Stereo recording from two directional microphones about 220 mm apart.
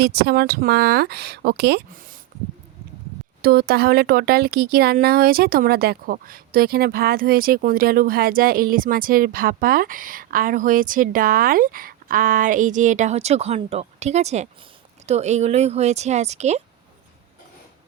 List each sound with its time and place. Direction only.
0.0 s speech: 45° right (ahead or behind)
3.4 s speech: 45° right (ahead or behind)